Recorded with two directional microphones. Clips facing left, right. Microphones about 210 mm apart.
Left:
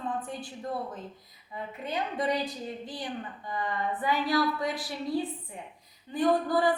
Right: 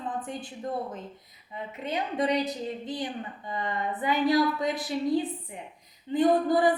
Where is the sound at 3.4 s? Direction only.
20° right (ahead or behind).